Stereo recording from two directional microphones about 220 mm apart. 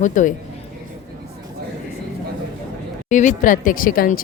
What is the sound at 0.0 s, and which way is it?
Speech, 35° left (ahead or behind).